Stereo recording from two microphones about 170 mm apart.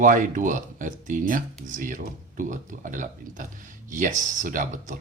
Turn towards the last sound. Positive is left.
turn(degrees=-50)  # may be behind; listen again after turning